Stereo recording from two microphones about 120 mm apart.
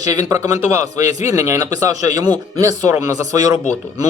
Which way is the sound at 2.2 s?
35° right (ahead or behind).